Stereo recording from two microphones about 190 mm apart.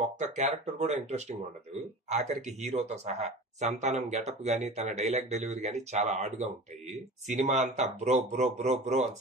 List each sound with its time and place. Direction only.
0.2 s speech: 40° right (ahead or behind)